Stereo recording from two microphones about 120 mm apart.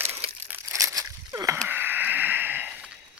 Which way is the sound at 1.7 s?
15° right (ahead or behind).